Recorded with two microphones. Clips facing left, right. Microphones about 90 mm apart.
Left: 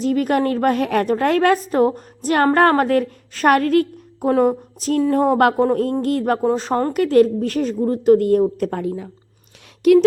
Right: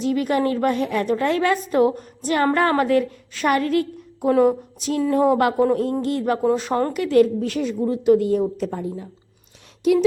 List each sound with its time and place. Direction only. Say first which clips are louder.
0.0 s a woman's voice: left 2 dB; 45° left (ahead or behind)
1.0 s a woman's voice: left 3 dB; 50° left (ahead or behind)
1.6 s a woman's voice: left 1 dB; 40° left (ahead or behind)
2.0 s a sound: left 3 dB; 50° left (ahead or behind)
2.5 s a woman's voice: left 4 dB; 50° left (ahead or behind)
4.3 s a woman's voice: even; 40° left (ahead or behind)
5.5 s a woman's voice: left 1 dB; 35° left (ahead or behind)
5.8 s a woman's voice: left 3 dB; 50° left (ahead or behind)
6.4 s a woman's voice: left 1 dB; 35° left (ahead or behind); by 8.8 s 55° left (ahead or behind)
8.8 s speech: left 4 dB; 90° left